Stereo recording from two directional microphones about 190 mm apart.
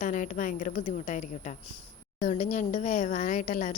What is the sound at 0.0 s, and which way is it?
A woman's voice, 40° left (ahead or behind).